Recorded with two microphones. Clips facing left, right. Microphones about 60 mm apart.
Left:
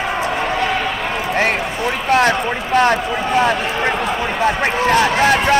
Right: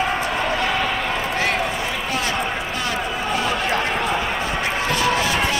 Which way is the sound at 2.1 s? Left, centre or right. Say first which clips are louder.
Left 11 dB; left.